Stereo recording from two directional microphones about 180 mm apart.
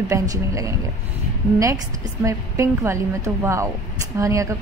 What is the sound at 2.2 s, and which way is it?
A woman's voice, 15° right (ahead or behind).